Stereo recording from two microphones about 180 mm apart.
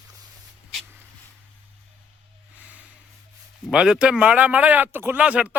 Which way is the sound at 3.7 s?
5° right (ahead or behind).